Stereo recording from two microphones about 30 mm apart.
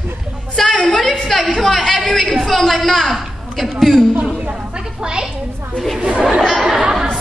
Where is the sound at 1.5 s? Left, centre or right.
Centre.